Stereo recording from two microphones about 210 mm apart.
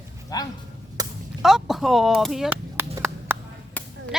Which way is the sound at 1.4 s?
Centre (ahead or behind).